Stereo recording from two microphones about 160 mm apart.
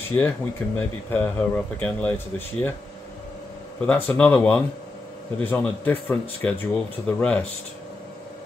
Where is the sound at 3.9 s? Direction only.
10° left (ahead or behind).